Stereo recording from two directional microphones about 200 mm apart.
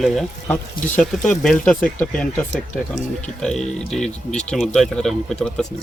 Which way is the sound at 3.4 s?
5° left (ahead or behind).